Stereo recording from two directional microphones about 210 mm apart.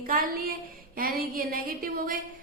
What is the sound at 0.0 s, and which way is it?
A woman's voice, 45° right (ahead or behind).